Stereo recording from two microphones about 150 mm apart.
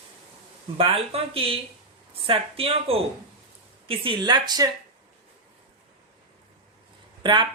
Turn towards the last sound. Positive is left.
turn(degrees=-30)  # may be behind; listen again after turning